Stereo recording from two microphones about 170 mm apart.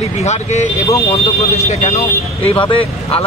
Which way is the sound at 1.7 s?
40° left (ahead or behind).